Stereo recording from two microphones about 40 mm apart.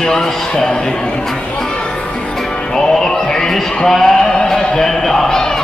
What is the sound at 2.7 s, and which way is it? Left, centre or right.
Music, centre.